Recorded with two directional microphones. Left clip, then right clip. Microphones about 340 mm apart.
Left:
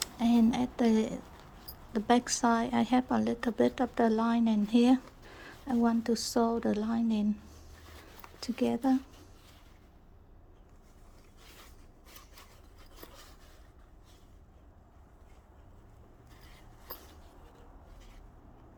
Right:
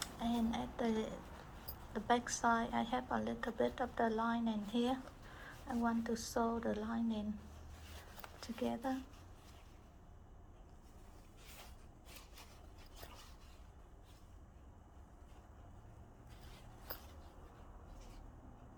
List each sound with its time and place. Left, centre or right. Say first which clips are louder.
0.0 s a woman's voice: left 11 dB; left
8.4 s a woman's voice: left 10 dB; left